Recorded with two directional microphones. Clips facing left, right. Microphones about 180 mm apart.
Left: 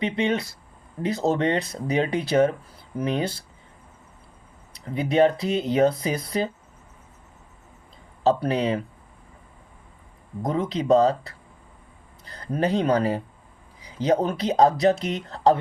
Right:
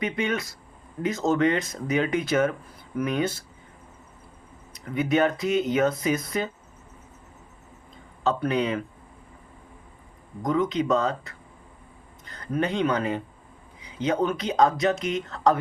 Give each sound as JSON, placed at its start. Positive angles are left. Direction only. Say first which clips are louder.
{"t": 0.0, "sound": "speech", "louder": "left 3 dB", "side_deg": 30}
{"t": 4.7, "sound": "speech", "louder": "even", "side_deg": 30}
{"t": 8.2, "sound": "speech", "louder": "left 3 dB", "side_deg": 35}
{"t": 10.4, "sound": "speech", "louder": "right 1 dB", "side_deg": 30}